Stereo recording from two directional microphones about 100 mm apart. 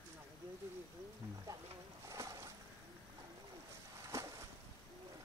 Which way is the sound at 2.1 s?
35° right (ahead or behind).